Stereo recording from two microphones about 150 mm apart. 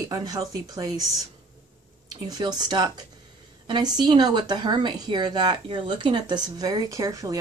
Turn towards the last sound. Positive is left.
turn(degrees=-25)  # may be behind; listen again after turning